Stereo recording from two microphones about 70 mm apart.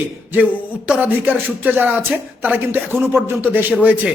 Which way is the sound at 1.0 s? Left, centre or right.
Right.